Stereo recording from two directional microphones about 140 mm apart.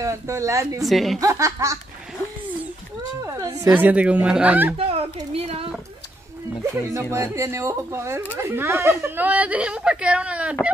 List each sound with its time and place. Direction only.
0.0 s speech: 20° right (ahead or behind)
0.8 s a woman's voice: centre (ahead or behind)
1.2 s speech: 25° right (ahead or behind)
3.3 s a woman's voice: 25° right (ahead or behind)
3.7 s speech: 10° right (ahead or behind)
4.7 s a sound: 45° right (ahead or behind)
6.6 s speech: 20° right (ahead or behind)